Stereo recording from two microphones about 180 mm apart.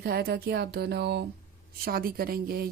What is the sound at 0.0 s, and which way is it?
A woman's voice, 60° right (ahead or behind).